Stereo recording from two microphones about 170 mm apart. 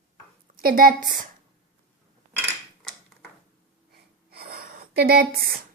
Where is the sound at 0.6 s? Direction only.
60° right (ahead or behind).